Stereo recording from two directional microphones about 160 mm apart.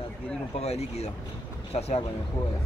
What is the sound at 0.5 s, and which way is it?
Speech, 40° left (ahead or behind).